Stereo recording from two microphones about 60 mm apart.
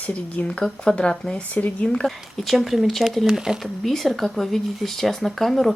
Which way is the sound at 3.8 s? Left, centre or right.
Centre.